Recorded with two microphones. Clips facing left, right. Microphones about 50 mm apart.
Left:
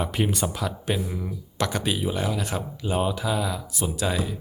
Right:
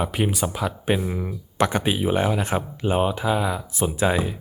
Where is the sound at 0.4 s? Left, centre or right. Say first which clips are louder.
Right 3 dB; centre.